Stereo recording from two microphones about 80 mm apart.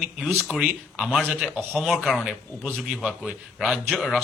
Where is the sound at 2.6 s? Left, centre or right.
Centre.